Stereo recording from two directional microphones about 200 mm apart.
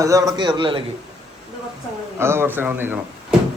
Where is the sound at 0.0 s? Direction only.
15° right (ahead or behind).